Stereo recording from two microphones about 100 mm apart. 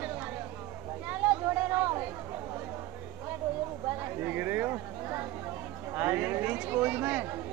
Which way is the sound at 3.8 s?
20° right (ahead or behind).